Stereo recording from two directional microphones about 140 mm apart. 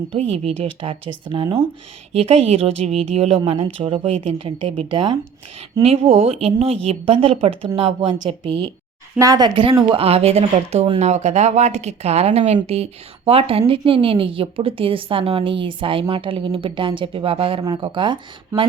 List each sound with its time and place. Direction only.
0.3 s a woman's voice: 45° right (ahead or behind)
9.1 s speech: 25° right (ahead or behind)
9.9 s a woman's voice: 45° right (ahead or behind)